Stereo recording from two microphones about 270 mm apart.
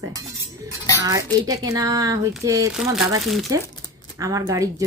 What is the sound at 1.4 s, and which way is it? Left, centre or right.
A woman's voice, centre.